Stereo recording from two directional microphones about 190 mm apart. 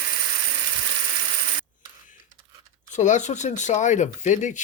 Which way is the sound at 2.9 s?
40° left (ahead or behind).